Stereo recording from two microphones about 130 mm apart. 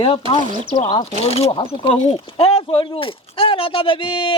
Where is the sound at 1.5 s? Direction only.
40° left (ahead or behind).